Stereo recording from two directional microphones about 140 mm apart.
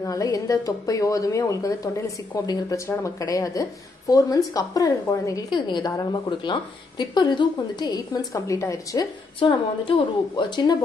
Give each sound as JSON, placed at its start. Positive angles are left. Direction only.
{"t": 0.0, "sound": "a woman's voice", "side_deg": 25}
{"t": 9.4, "sound": "a woman's voice", "side_deg": 40}